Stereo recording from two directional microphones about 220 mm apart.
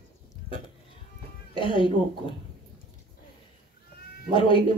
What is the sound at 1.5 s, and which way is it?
Speech, 25° left (ahead or behind).